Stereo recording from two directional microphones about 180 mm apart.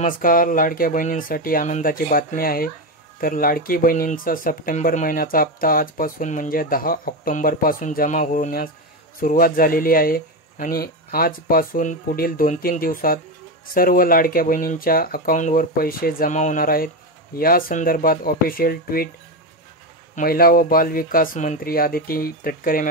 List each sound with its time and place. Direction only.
0.0 s speech: 50° left (ahead or behind)
20.2 s speech: 55° left (ahead or behind)